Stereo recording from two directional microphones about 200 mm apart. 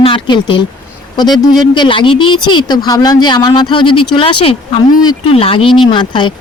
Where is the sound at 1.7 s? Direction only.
25° left (ahead or behind).